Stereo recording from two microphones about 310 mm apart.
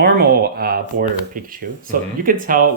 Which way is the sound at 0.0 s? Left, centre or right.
Right.